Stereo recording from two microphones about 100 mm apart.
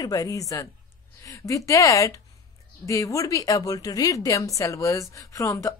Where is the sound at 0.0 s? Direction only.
35° left (ahead or behind).